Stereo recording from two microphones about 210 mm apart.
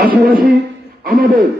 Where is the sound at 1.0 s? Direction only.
40° right (ahead or behind).